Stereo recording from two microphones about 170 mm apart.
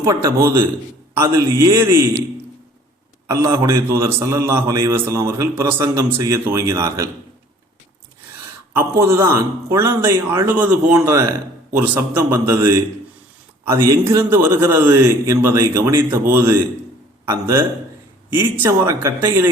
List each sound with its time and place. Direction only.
0.0 s a man's voice: 15° right (ahead or behind)
3.2 s a man's voice: 15° right (ahead or behind)
8.7 s a man's voice: 15° right (ahead or behind)